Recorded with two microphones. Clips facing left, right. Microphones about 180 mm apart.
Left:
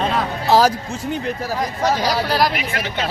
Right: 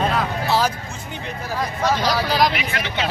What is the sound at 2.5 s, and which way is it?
Speech, 45° left (ahead or behind).